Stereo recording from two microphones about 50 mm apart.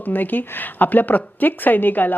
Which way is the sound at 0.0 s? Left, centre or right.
Left.